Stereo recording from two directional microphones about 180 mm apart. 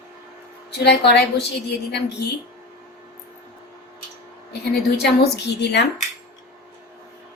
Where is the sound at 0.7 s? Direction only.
70° left (ahead or behind).